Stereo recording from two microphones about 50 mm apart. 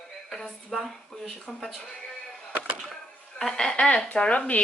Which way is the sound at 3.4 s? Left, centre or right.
Centre.